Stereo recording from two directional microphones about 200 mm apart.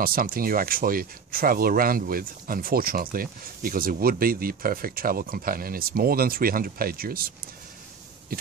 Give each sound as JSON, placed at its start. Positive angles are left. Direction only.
{"t": 0.0, "sound": "speech", "side_deg": -45}